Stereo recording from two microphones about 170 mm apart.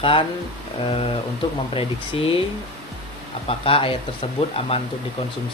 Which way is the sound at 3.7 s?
35° left (ahead or behind).